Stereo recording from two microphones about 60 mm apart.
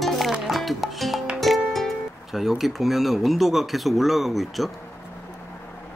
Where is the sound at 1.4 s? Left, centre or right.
Centre.